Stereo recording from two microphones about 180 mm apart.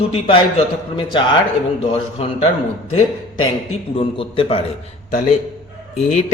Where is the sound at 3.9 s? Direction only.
30° left (ahead or behind).